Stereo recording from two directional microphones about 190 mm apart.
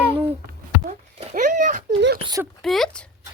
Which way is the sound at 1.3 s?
45° right (ahead or behind).